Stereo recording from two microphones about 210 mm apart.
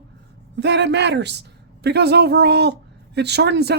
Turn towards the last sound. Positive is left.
turn(degrees=-50)  # may be behind; listen again after turning